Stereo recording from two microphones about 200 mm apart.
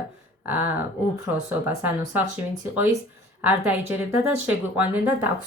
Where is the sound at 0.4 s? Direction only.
10° right (ahead or behind).